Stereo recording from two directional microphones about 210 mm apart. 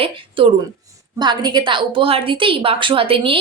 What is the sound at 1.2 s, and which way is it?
A woman's voice, 20° right (ahead or behind).